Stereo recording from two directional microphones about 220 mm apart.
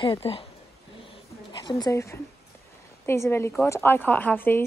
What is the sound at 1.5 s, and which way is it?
A woman's voice, 20° left (ahead or behind).